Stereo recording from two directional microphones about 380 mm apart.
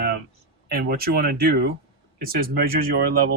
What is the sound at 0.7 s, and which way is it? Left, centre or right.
Speech, right.